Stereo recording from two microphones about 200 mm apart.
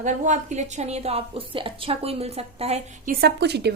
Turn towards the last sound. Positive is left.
turn(degrees=-55)  # may be behind; listen again after turning